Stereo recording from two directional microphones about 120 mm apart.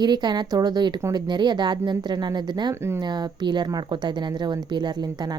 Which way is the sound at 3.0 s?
35° right (ahead or behind).